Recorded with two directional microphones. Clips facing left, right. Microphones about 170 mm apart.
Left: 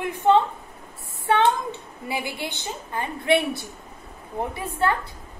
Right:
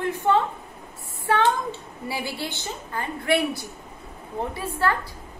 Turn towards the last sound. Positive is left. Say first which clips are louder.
# left 1 dB
turn(degrees=20)  # may be behind; listen again after turning